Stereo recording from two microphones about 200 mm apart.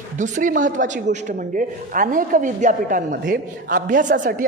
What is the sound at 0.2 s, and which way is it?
A woman's voice, 40° right (ahead or behind).